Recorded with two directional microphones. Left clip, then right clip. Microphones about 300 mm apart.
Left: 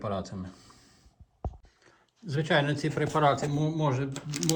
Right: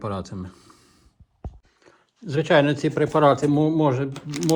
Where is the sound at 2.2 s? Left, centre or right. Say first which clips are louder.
Right 8 dB; centre.